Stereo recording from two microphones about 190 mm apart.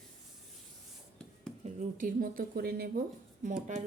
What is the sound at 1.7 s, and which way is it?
Speech, 40° right (ahead or behind).